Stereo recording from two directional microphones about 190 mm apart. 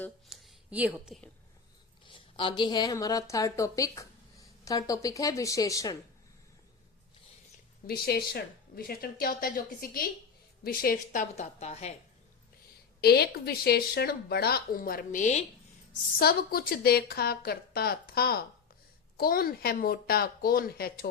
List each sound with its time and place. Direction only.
0.3 s a sound: 5° right (ahead or behind)
2.0 s a woman's voice: 25° left (ahead or behind)
7.9 s a woman's voice: 55° left (ahead or behind); by 11.9 s 35° left (ahead or behind)
13.0 s speech: 55° left (ahead or behind); by 15.4 s 40° left (ahead or behind)
16.1 s a woman's voice: 55° left (ahead or behind)